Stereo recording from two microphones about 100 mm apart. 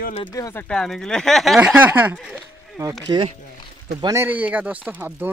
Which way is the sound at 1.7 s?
20° right (ahead or behind).